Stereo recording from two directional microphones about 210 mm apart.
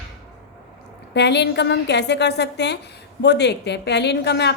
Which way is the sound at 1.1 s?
55° left (ahead or behind).